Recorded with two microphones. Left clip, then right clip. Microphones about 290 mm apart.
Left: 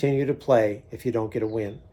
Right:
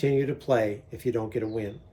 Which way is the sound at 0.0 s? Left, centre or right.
Centre.